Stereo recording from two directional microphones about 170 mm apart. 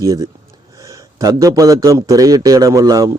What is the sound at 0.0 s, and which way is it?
A man's voice, 20° right (ahead or behind).